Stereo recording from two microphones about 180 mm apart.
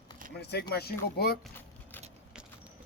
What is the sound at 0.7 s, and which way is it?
Speech, 60° left (ahead or behind).